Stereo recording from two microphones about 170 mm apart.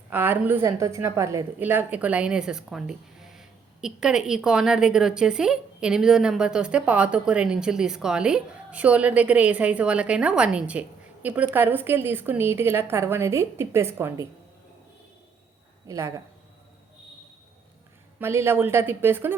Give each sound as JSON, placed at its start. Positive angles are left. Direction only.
{"t": 0.1, "sound": "a woman's voice", "side_deg": -10}
{"t": 15.9, "sound": "a woman's voice", "side_deg": -20}
{"t": 18.2, "sound": "a woman's voice", "side_deg": -15}